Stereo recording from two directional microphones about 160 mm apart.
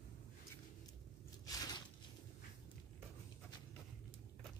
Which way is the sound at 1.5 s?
25° left (ahead or behind).